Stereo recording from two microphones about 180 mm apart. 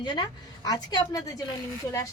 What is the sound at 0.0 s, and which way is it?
A woman's voice, 25° left (ahead or behind).